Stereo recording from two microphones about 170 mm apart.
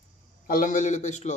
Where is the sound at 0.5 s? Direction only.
50° left (ahead or behind).